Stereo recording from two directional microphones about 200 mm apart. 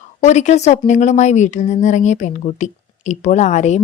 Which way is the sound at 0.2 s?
35° left (ahead or behind).